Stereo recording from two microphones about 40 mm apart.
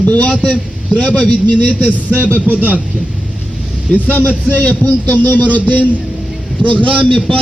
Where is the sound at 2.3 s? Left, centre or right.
Right.